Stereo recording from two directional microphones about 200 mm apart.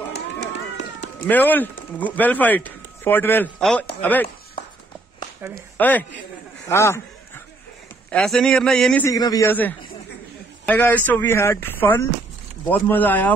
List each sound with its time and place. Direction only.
0.1 s run: 60° left (ahead or behind)
1.2 s speech: 10° left (ahead or behind)
5.5 s speech: 10° left (ahead or behind)
8.1 s speech: centre (ahead or behind)